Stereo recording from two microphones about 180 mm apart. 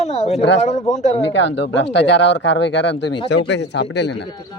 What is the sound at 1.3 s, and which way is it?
Speech, 85° left.